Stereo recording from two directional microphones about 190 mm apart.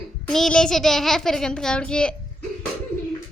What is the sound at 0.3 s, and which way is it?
A child's voice, 5° left (ahead or behind).